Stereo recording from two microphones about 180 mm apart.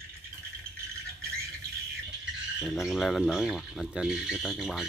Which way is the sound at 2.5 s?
Centre (ahead or behind).